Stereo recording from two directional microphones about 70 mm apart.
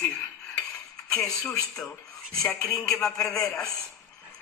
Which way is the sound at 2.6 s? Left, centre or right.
Left.